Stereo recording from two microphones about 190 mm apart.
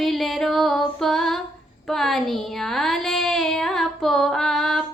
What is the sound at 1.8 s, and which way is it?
Speech, centre (ahead or behind).